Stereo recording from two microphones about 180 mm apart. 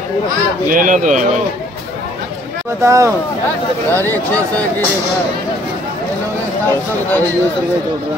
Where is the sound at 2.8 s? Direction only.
15° right (ahead or behind).